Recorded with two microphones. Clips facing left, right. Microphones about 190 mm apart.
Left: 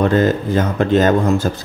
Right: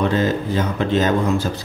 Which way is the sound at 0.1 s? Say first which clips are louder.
Left 4 dB; 50° left (ahead or behind).